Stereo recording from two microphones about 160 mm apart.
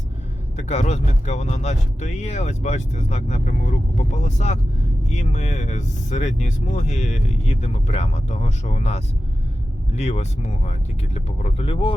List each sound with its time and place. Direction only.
0.5 s speech: 45° left (ahead or behind)